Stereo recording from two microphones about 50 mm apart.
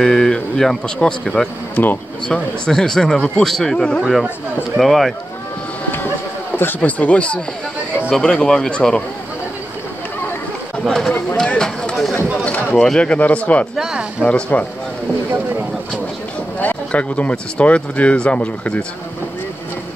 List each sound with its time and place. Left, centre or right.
0.0 s speech: centre
1.8 s speech: left
2.2 s speech: centre
4.0 s speech: centre
6.8 s speech: left
8.1 s speech: centre
11.3 s a sound: centre
12.7 s speech: centre
13.7 s speech: centre
14.5 s speech: left
16.6 s speech: left